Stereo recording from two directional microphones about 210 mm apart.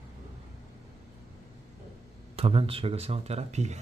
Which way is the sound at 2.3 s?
25° right (ahead or behind).